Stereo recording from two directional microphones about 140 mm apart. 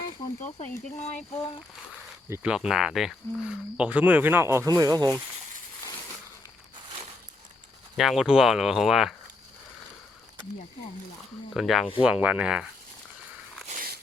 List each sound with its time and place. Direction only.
0.9 s speech: 55° left (ahead or behind)
2.4 s speech: 5° right (ahead or behind); by 5.2 s 25° right (ahead or behind)
7.9 s speech: 5° right (ahead or behind)
11.5 s speech: centre (ahead or behind)
13.7 s a sound: 75° right (ahead or behind)